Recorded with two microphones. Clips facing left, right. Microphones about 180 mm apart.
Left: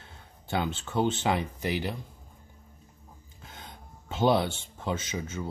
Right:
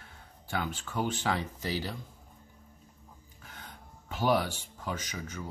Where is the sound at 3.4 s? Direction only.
20° left (ahead or behind).